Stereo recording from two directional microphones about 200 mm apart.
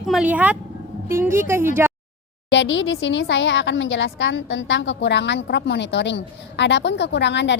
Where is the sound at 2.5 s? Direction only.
65° left (ahead or behind).